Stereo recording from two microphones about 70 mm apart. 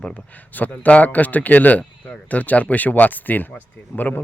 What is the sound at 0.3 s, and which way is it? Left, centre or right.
Speech, left.